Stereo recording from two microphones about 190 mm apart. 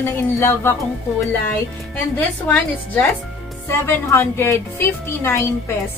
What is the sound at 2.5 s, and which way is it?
Speech, 10° left (ahead or behind).